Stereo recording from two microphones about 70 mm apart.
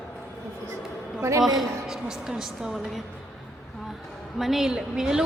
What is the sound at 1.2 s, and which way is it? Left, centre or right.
Speech, right.